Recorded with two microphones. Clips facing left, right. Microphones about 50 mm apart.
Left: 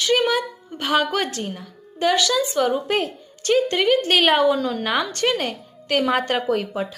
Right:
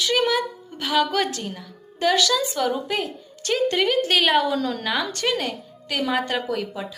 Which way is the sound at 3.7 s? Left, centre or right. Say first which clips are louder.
Left 2 dB; left.